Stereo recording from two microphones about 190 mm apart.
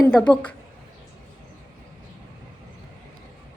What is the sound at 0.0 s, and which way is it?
Speech, 5° left (ahead or behind).